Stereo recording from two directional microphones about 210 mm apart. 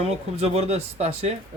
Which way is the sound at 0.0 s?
30° right (ahead or behind).